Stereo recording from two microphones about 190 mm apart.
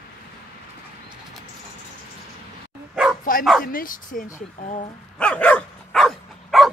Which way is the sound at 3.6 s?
50° left (ahead or behind).